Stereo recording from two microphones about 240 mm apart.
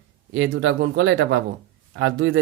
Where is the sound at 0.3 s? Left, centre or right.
Right.